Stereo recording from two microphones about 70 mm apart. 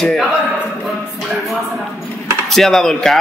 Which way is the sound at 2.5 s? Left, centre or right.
Centre.